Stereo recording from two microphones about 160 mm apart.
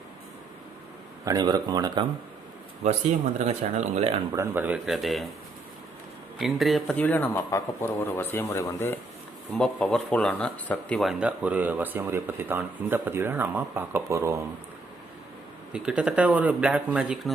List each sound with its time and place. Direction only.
1.2 s speech: 25° right (ahead or behind)
3.3 s speech: 45° right (ahead or behind)
4.3 s speech: 15° right (ahead or behind); by 5.3 s centre (ahead or behind)
6.4 s a man's voice: centre (ahead or behind); by 9.0 s 15° left (ahead or behind)
9.6 s speech: 5° left (ahead or behind); by 14.4 s 15° right (ahead or behind)
15.7 s speech: 5° right (ahead or behind)